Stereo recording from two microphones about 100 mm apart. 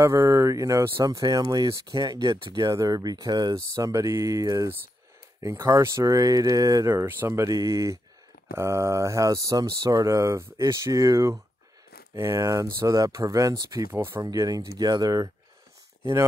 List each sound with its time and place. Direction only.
0.0 s speech: 30° right (ahead or behind)